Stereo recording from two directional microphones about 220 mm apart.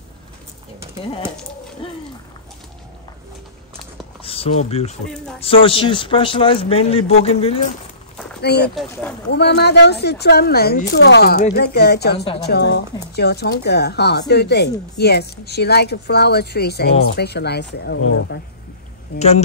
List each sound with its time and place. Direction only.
1.8 s a man's voice: 25° left (ahead or behind)
4.2 s speech: 25° left (ahead or behind)
5.1 s speech: 5° left (ahead or behind)
5.4 s a man's voice: 25° left (ahead or behind)
8.4 s speech: 50° left (ahead or behind)
18.0 s speech: 60° left (ahead or behind)
19.1 s a man's voice: 30° left (ahead or behind)